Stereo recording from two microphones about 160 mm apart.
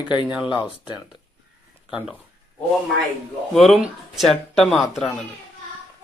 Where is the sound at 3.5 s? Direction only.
Centre (ahead or behind).